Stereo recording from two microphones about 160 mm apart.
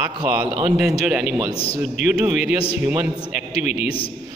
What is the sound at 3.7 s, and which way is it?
Speech, 40° left (ahead or behind).